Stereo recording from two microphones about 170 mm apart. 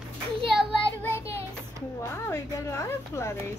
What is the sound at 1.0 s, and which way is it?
Child singing, 15° left (ahead or behind).